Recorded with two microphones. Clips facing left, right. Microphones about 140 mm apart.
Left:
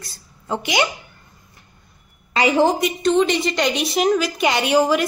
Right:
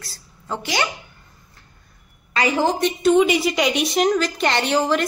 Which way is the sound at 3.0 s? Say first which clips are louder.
Right 2 dB; 5° right (ahead or behind).